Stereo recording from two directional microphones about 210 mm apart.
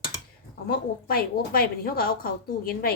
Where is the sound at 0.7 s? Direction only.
50° left (ahead or behind).